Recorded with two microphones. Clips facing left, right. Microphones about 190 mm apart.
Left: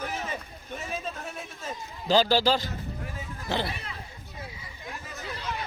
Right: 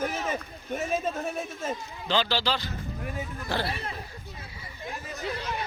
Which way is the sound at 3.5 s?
20° left (ahead or behind).